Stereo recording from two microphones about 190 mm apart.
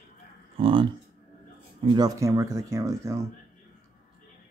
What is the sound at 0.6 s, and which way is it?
Speech, 25° right (ahead or behind).